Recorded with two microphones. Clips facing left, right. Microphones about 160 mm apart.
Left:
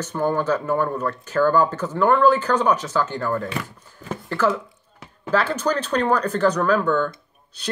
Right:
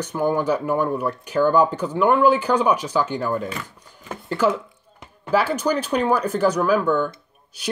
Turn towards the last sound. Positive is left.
turn(degrees=-10)  # may be behind; listen again after turning